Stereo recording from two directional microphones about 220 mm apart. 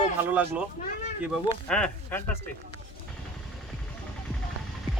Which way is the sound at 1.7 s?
5° left (ahead or behind).